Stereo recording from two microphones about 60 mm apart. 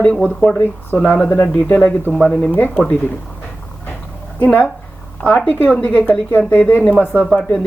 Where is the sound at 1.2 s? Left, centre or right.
Left.